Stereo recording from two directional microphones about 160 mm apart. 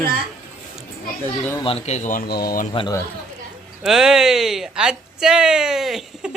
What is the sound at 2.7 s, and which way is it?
Speech, 30° left (ahead or behind).